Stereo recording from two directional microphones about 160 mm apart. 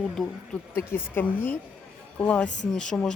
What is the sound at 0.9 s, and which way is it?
A woman's voice, 15° left (ahead or behind).